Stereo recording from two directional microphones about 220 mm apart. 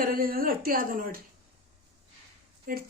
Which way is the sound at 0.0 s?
40° right (ahead or behind).